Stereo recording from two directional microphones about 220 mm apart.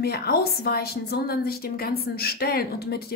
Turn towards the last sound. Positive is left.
turn(degrees=45)  # may be behind; listen again after turning